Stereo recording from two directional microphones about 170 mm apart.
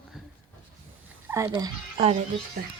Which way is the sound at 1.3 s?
10° right (ahead or behind).